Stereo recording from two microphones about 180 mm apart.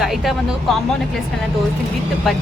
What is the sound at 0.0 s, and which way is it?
Speech, centre (ahead or behind).